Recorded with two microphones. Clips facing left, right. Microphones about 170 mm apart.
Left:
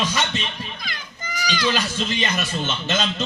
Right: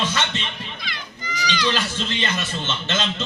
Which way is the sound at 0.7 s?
45° left (ahead or behind).